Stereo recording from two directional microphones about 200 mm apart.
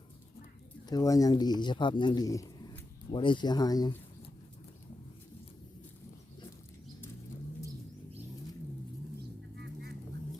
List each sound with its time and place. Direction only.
0.9 s speech: 20° left (ahead or behind)